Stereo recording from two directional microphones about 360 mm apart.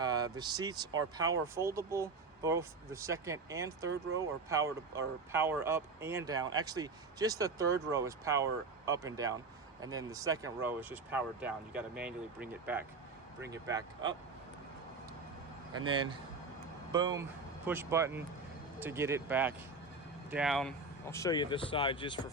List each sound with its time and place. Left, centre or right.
0.0 s speech: centre
15.9 s speech: centre